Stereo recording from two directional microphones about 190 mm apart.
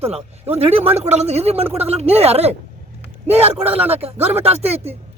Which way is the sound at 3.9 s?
30° right (ahead or behind).